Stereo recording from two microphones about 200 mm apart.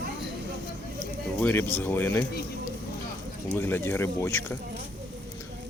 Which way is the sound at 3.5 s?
10° left (ahead or behind).